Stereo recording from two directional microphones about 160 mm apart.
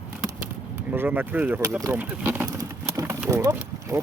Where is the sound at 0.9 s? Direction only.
15° right (ahead or behind).